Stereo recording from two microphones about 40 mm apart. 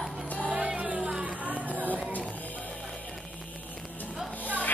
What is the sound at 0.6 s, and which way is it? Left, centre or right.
Music, right.